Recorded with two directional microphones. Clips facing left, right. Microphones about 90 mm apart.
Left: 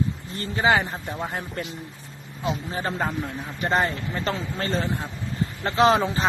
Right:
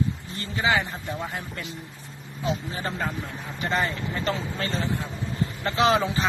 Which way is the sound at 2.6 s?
40° left (ahead or behind).